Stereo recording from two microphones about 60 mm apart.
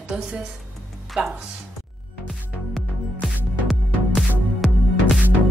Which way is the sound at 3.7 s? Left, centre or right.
Centre.